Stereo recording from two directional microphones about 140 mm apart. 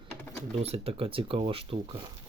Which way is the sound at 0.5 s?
45° right (ahead or behind).